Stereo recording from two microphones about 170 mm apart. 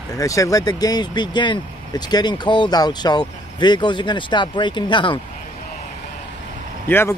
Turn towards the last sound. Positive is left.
turn(degrees=15)  # may be behind; listen again after turning